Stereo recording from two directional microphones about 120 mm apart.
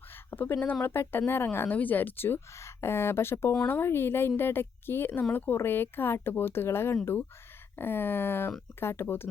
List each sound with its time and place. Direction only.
0.3 s speech: 20° left (ahead or behind)
3.5 s speech: 5° left (ahead or behind)
3.8 s speech: 20° left (ahead or behind)